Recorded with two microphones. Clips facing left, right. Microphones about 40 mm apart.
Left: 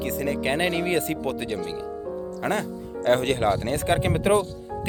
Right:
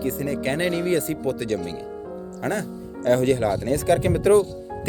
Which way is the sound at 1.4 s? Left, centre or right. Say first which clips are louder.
Right 3 dB; left.